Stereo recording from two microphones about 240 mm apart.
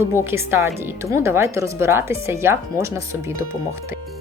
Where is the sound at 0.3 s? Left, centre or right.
Centre.